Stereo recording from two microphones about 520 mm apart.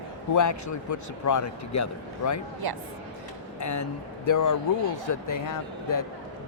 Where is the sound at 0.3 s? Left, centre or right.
Left.